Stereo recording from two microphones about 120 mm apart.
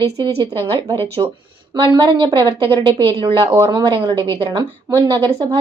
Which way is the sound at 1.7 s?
40° right (ahead or behind).